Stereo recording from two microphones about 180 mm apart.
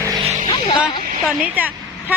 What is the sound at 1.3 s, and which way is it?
Speech, 5° right (ahead or behind).